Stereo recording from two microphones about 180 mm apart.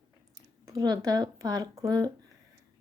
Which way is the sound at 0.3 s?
20° right (ahead or behind).